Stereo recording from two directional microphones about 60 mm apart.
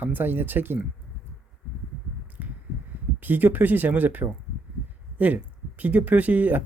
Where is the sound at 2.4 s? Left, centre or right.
Right.